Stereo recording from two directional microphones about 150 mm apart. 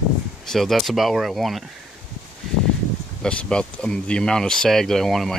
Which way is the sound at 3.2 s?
5° left (ahead or behind).